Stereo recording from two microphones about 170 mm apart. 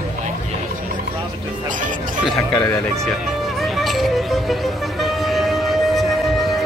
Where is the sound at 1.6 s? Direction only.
50° right (ahead or behind).